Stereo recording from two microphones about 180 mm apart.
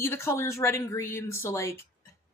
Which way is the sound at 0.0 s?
15° left (ahead or behind).